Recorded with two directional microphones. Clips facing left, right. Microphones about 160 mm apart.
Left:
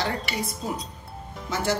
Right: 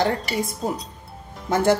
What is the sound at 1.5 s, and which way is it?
Speech, 50° right (ahead or behind).